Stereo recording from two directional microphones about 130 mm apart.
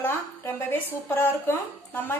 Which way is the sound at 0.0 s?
15° left (ahead or behind).